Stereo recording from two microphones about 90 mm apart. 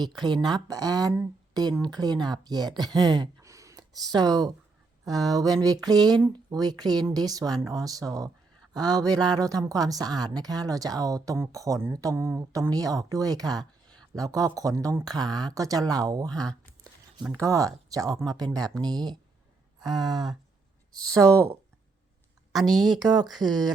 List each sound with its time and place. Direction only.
0.2 s speech: 55° right (ahead or behind)
3.4 s a sound: 35° right (ahead or behind)
5.0 s speech: 45° right (ahead or behind)
16.3 s speech: 5° left (ahead or behind)
17.4 s speech: 40° right (ahead or behind)
21.2 s speech: 40° right (ahead or behind)
22.5 s a woman's voice: centre (ahead or behind)
23.0 s speech: 45° right (ahead or behind)